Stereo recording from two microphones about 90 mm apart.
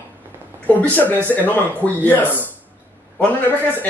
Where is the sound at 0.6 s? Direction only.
20° left (ahead or behind).